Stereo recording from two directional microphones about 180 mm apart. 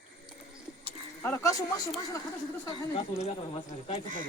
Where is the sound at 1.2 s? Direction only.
15° left (ahead or behind).